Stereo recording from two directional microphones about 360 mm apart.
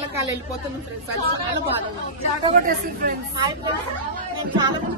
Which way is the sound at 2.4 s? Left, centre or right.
Right.